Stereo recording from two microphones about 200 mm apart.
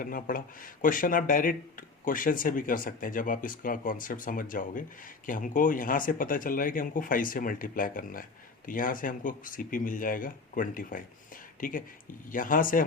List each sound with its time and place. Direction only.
0.0 s speech: 45° left (ahead or behind)